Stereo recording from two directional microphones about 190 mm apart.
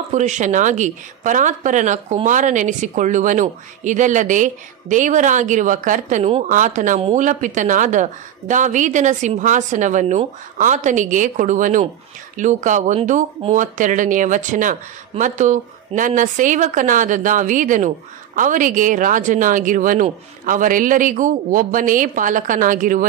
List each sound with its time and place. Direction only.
0.1 s a woman's voice: 40° right (ahead or behind)